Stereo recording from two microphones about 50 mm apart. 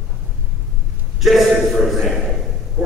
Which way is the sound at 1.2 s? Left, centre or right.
Centre.